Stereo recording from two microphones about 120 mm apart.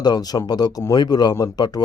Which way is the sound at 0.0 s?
35° left (ahead or behind).